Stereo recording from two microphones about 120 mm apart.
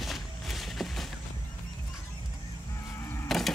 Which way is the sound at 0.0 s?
Centre (ahead or behind).